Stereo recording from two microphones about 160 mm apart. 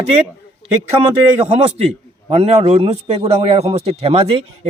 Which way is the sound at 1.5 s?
40° right (ahead or behind).